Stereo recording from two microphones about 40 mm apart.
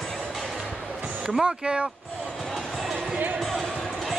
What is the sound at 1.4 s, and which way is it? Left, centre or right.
Speech, centre.